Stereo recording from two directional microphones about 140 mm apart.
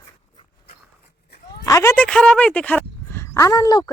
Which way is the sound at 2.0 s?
5° left (ahead or behind).